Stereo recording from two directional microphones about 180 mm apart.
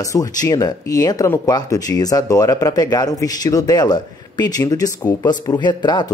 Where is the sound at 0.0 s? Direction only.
20° left (ahead or behind).